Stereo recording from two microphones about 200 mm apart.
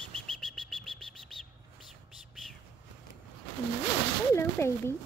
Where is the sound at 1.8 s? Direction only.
Centre (ahead or behind).